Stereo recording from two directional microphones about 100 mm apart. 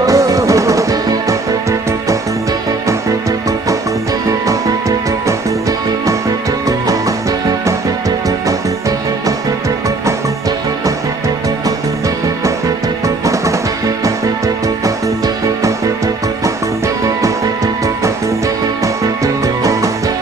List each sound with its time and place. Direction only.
0.0 s music: 35° right (ahead or behind)
13.0 s music: 30° right (ahead or behind)
19.2 s music: 35° right (ahead or behind)